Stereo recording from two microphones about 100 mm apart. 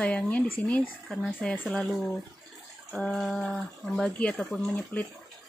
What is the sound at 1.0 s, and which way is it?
Speech, centre (ahead or behind).